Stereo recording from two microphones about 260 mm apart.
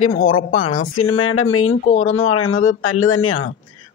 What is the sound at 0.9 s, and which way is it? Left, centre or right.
Speech, left.